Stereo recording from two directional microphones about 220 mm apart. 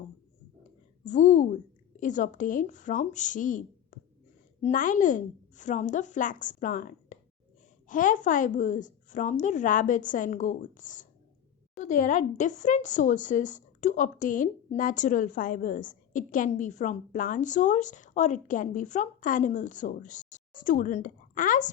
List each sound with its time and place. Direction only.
1.0 s speech: 35° left (ahead or behind)
4.6 s speech: 35° left (ahead or behind)